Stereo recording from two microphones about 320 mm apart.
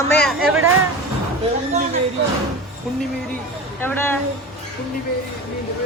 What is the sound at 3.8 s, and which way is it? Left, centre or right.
Speech, centre.